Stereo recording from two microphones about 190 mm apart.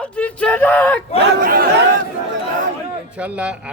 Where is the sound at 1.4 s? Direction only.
50° right (ahead or behind).